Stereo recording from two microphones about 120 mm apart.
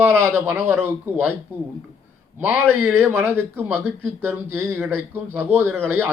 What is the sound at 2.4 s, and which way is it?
Speech, 15° right (ahead or behind).